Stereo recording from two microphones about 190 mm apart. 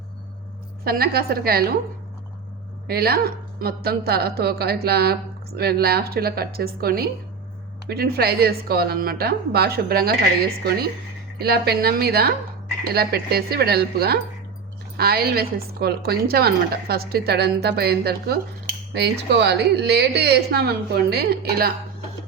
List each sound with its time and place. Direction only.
0.9 s a woman's voice: 55° right (ahead or behind)
2.8 s a woman's voice: 55° right (ahead or behind)